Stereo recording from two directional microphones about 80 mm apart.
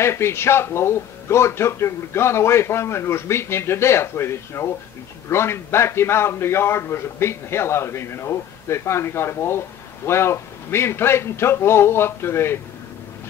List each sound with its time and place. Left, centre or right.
0.0 s a man's voice: left